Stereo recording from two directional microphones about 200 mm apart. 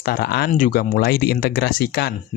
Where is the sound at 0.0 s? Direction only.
50° left (ahead or behind).